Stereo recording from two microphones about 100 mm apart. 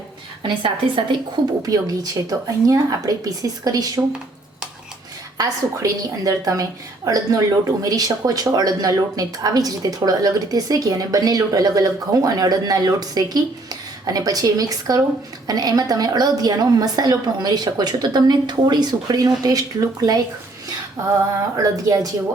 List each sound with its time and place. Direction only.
0.4 s a woman's voice: 60° right (ahead or behind)
1.6 s a woman's voice: 35° right (ahead or behind)
5.4 s a woman's voice: 35° right (ahead or behind)
21.5 s a woman's voice: 35° right (ahead or behind)